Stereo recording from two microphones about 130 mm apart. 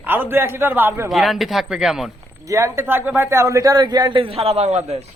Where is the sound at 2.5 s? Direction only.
20° right (ahead or behind); by 5.0 s 55° right (ahead or behind).